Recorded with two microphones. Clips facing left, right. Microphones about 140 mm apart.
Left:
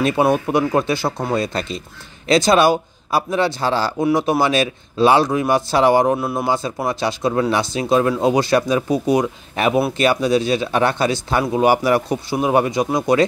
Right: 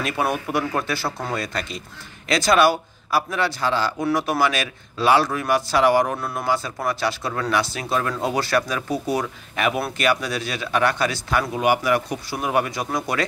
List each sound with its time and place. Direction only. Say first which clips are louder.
0.0 s speech: left 8 dB; 25° left (ahead or behind)